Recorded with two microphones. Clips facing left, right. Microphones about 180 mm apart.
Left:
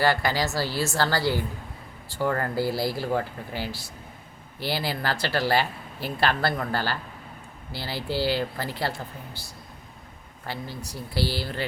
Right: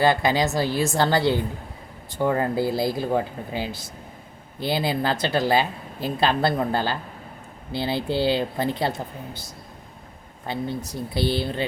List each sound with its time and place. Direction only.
0.0 s speech: 20° right (ahead or behind)